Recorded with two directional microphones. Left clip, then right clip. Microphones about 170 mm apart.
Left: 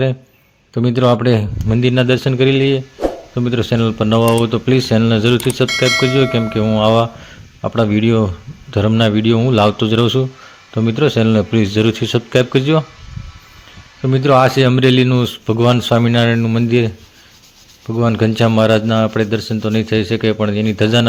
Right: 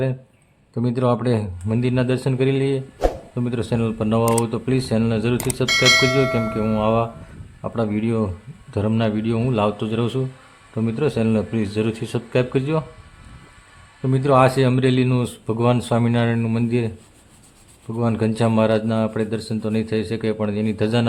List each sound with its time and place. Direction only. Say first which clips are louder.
0.7 s speech: left 7 dB; 20° left (ahead or behind)
5.6 s speech: right 1 dB; centre (ahead or behind)
6.5 s speech: left 7 dB; 20° left (ahead or behind)
14.0 s a man's voice: left 5 dB; 15° left (ahead or behind)